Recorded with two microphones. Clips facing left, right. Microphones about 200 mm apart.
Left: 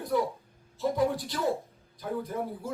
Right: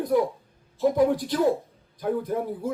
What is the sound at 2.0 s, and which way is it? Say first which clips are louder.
Speech: right 6 dB; 50° right (ahead or behind).